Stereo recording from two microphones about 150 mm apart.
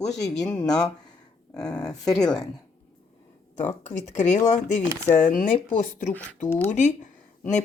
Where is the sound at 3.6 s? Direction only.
50° left (ahead or behind).